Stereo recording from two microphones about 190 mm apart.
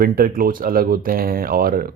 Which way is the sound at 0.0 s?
50° right (ahead or behind).